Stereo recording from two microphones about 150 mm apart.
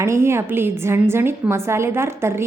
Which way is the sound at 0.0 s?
20° right (ahead or behind).